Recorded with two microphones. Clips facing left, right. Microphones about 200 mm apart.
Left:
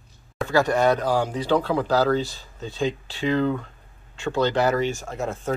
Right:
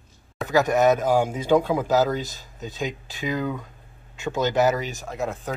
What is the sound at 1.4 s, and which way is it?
Speech, 10° right (ahead or behind).